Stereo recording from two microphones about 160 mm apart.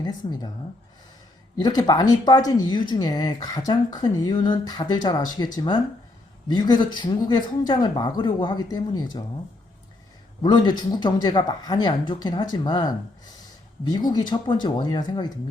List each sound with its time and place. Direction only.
1.5 s speech: 25° left (ahead or behind)
6.5 s speech: 25° left (ahead or behind)
10.4 s speech: 30° left (ahead or behind)